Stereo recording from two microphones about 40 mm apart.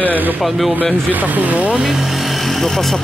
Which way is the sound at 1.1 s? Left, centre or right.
Right.